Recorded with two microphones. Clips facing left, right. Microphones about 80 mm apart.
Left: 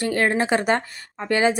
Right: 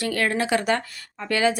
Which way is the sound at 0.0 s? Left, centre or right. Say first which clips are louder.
Left 3 dB; left.